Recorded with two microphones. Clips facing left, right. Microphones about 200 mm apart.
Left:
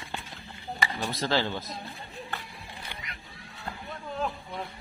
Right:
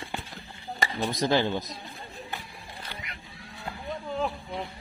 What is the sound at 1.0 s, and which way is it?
Speech, 15° right (ahead or behind).